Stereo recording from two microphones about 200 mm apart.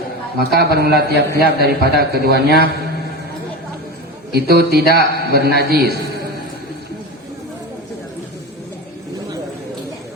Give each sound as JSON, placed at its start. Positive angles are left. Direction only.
{"t": 0.3, "sound": "a man's voice", "side_deg": -50}
{"t": 4.4, "sound": "a man's voice", "side_deg": -55}